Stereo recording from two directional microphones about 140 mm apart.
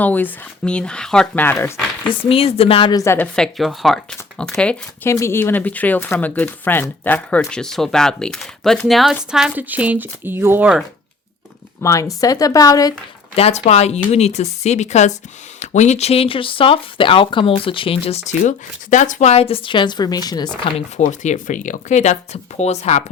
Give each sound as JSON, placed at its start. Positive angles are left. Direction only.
{"t": 0.0, "sound": "speech", "side_deg": 10}
{"t": 2.3, "sound": "speech", "side_deg": 45}
{"t": 2.9, "sound": "a woman's voice", "side_deg": 20}
{"t": 3.2, "sound": "speech", "side_deg": 5}
{"t": 5.0, "sound": "speech", "side_deg": 20}
{"t": 11.8, "sound": "a woman's voice", "side_deg": 25}
{"t": 13.3, "sound": "speech", "side_deg": 50}
{"t": 20.7, "sound": "speech", "side_deg": 45}
{"t": 21.0, "sound": "speech", "side_deg": 60}